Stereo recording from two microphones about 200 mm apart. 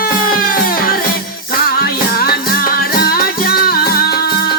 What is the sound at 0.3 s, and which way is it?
Music, 45° left (ahead or behind).